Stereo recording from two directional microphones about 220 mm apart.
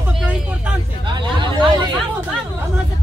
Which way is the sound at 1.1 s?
20° right (ahead or behind).